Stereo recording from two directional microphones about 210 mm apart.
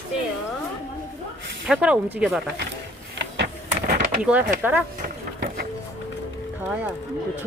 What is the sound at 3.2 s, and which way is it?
Power windows, 50° right (ahead or behind).